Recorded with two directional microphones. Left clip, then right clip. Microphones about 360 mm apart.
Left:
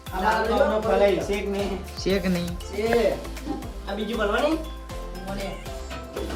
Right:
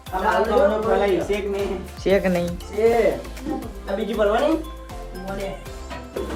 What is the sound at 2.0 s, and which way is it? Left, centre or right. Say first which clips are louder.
Speech: right 7 dB; centre.